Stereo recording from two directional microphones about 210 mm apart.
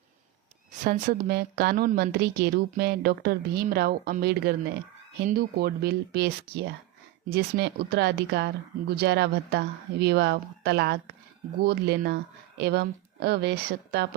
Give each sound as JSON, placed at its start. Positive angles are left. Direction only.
{"t": 0.9, "sound": "a woman's voice", "side_deg": -45}